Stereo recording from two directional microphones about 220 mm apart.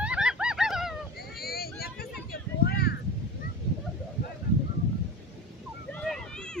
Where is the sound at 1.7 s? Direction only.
45° left (ahead or behind).